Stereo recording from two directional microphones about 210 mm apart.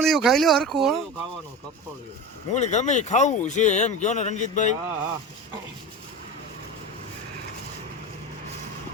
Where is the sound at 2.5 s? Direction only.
35° left (ahead or behind).